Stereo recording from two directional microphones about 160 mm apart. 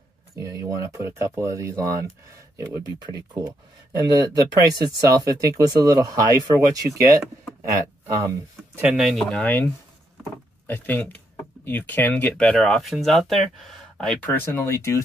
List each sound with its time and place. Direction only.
0.4 s speech: 20° right (ahead or behind)
9.1 s speech: 5° left (ahead or behind)
10.7 s speech: 10° left (ahead or behind)